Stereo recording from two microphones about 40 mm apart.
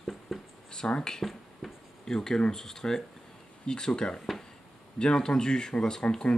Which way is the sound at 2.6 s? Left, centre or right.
Centre.